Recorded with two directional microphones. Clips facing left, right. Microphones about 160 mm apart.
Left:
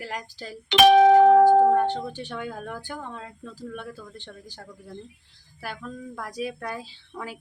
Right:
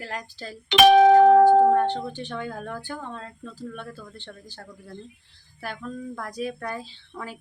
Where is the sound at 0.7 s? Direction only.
90° right.